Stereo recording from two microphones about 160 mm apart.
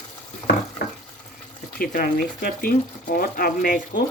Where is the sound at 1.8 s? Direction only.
60° left (ahead or behind).